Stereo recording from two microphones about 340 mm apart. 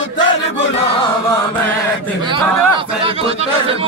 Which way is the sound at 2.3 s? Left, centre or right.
Centre.